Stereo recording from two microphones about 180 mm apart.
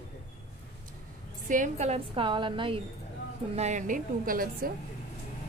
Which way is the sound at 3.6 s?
40° right (ahead or behind).